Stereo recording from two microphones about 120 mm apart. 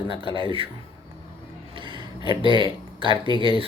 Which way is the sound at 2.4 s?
45° right (ahead or behind).